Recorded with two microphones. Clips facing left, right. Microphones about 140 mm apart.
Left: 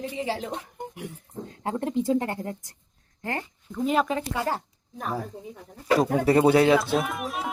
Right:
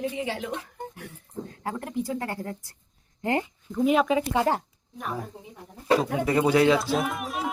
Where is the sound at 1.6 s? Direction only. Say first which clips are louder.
Left 5 dB; 25° left (ahead or behind).